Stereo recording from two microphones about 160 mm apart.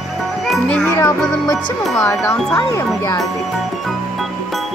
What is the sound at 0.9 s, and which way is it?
Music, 20° left (ahead or behind).